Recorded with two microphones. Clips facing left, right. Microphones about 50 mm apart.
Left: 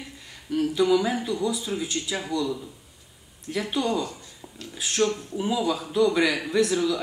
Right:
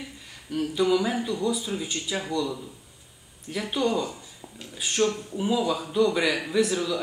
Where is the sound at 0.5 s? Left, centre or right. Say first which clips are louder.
Left 2 dB; centre.